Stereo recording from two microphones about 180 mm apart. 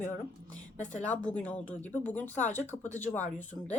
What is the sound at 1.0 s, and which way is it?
Speech, 5° left (ahead or behind).